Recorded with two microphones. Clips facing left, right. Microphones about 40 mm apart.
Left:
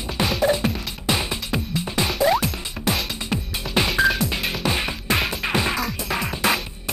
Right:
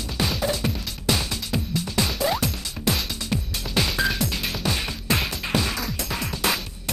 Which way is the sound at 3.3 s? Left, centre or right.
Left.